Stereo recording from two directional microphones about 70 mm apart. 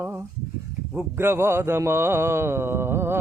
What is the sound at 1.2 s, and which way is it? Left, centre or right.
Music, right.